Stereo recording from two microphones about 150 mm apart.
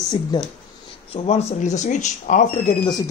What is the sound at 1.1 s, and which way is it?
Speech, 45° left (ahead or behind).